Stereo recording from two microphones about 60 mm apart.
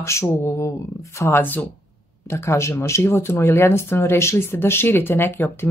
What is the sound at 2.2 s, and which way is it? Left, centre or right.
Speech, left.